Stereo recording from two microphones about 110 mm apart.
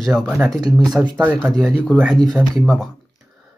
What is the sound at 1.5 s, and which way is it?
A man's voice, 5° right (ahead or behind).